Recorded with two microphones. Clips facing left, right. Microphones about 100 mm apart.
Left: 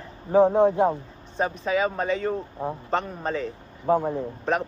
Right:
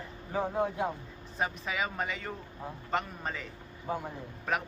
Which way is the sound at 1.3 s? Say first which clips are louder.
Left 9 dB; 35° left (ahead or behind).